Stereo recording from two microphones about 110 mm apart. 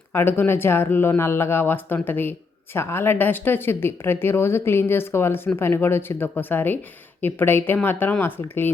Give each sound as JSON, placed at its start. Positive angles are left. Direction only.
{"t": 0.1, "sound": "speech", "side_deg": 20}